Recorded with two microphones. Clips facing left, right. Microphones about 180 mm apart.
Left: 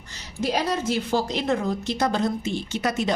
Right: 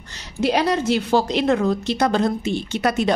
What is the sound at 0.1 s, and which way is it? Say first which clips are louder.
A woman's voice: right 5 dB; 70° right (ahead or behind).